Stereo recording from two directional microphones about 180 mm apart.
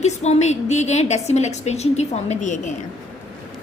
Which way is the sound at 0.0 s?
40° left (ahead or behind).